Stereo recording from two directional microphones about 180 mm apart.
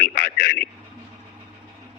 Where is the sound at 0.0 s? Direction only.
50° left (ahead or behind).